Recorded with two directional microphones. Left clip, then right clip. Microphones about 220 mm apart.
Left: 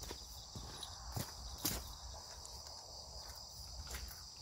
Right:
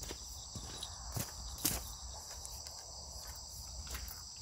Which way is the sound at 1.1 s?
20° right (ahead or behind).